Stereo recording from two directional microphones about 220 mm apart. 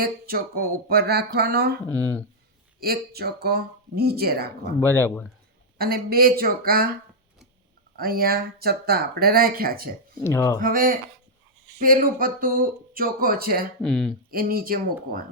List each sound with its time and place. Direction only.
0.0 s speech: 45° right (ahead or behind)
2.8 s speech: 45° right (ahead or behind)
4.8 s speech: 10° left (ahead or behind)
5.7 s speech: 45° right (ahead or behind)
7.9 s speech: 40° right (ahead or behind)
10.2 s speech: 15° left (ahead or behind)
10.6 s speech: 40° right (ahead or behind)
13.8 s speech: centre (ahead or behind)
14.3 s speech: 40° right (ahead or behind)